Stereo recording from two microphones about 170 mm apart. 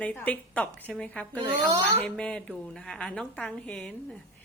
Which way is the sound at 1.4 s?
20° right (ahead or behind).